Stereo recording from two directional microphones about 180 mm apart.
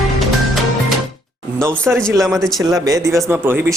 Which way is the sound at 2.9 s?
20° right (ahead or behind).